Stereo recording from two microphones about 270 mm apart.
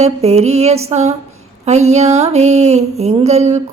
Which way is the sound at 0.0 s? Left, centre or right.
Right.